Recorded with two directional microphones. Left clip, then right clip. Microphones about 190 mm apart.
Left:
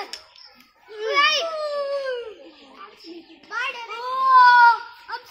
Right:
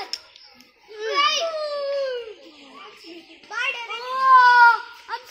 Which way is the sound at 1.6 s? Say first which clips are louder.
Even; 60° left (ahead or behind).